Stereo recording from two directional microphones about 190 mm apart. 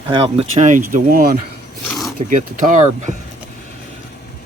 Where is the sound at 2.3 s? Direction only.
40° right (ahead or behind).